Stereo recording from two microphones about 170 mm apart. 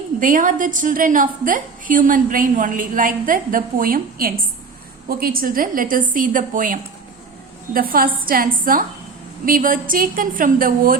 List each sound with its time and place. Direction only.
0.2 s a woman's voice: 50° right (ahead or behind)